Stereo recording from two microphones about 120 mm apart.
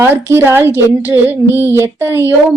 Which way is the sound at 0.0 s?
20° right (ahead or behind).